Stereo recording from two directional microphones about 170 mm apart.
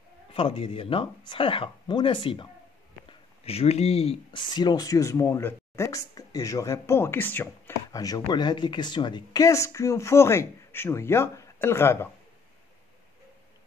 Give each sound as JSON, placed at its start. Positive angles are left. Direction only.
{"t": 0.3, "sound": "speech", "side_deg": 30}